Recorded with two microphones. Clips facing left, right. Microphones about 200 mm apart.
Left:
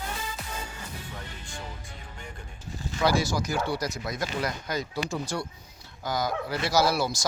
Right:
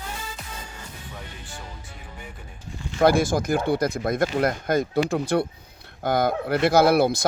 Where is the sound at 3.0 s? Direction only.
50° right (ahead or behind).